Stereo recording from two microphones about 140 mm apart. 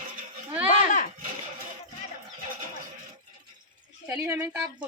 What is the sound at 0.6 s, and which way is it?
Speech, 60° left (ahead or behind).